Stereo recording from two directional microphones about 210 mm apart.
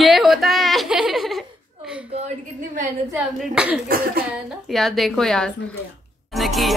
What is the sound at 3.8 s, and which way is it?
Speech, 45° right (ahead or behind).